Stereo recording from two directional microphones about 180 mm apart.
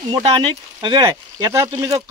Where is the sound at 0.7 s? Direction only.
25° right (ahead or behind).